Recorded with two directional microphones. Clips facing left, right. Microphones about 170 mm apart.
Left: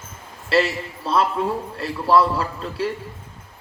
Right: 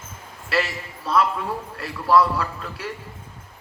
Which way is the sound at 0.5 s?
25° left (ahead or behind).